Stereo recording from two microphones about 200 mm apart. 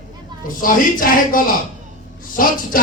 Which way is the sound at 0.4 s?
45° left (ahead or behind).